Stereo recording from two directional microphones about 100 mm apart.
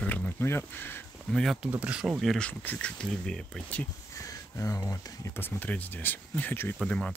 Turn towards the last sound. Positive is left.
turn(degrees=5)  # may be behind; listen again after turning